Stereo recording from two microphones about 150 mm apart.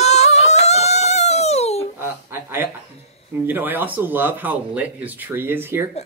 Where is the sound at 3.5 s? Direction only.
10° right (ahead or behind).